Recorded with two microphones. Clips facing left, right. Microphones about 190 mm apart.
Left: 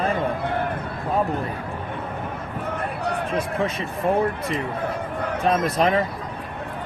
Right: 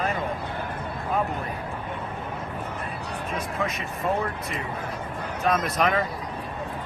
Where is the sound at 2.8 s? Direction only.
65° left (ahead or behind).